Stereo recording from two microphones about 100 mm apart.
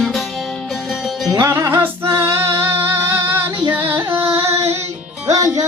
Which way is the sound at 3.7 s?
20° right (ahead or behind).